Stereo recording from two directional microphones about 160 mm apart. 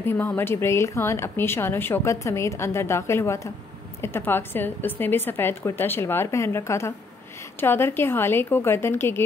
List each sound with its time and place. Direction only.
0.0 s speech: 10° left (ahead or behind)